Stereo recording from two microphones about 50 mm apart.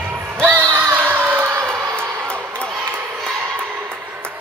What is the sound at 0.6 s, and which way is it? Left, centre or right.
Music, right.